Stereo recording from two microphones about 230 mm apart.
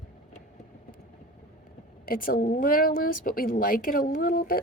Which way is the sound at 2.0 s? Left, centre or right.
Left.